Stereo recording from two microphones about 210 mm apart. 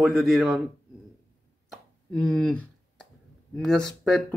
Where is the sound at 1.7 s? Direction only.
5° left (ahead or behind).